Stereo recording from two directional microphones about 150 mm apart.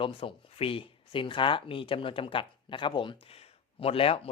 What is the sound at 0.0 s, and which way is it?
Speech, 35° left (ahead or behind).